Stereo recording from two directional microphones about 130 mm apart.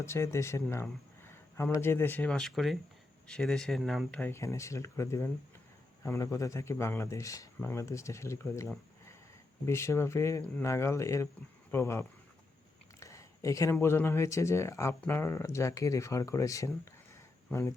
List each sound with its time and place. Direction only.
0.0 s speech: 20° left (ahead or behind)
13.0 s a sound: 25° left (ahead or behind)
13.8 s speech: 20° left (ahead or behind)